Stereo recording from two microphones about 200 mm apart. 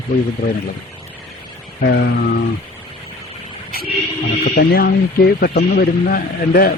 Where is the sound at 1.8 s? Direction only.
55° left (ahead or behind).